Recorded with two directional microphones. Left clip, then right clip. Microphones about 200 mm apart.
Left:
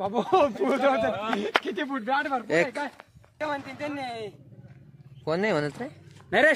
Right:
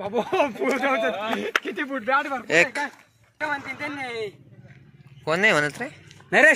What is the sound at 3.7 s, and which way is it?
Speech, 50° left (ahead or behind).